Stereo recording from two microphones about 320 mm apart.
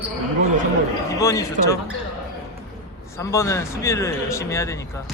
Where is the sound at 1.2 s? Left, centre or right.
Centre.